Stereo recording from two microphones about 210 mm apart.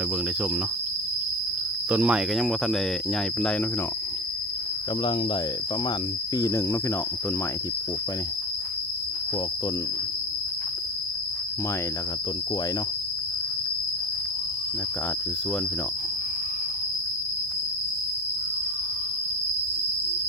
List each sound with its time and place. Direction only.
1.9 s speech: 5° right (ahead or behind)
6.3 s cricket: 15° left (ahead or behind)